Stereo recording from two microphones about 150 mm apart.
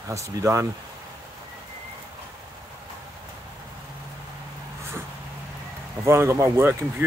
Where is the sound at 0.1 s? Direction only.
20° right (ahead or behind).